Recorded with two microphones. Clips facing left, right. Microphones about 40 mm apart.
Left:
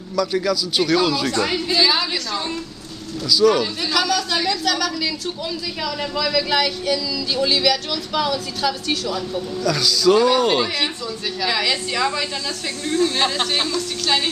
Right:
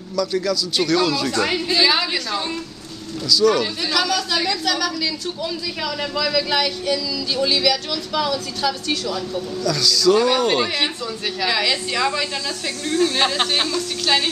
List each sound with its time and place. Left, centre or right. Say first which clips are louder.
0.1 s speech: left 1 dB; centre
1.4 s a woman's voice: right 1 dB; centre
3.3 s speech: left 1 dB; centre
3.8 s speech: left 1 dB; centre
10.1 s speech: left 1 dB; centre
11.4 s speech: even; centre
13.2 s a woman's voice: right 1 dB; centre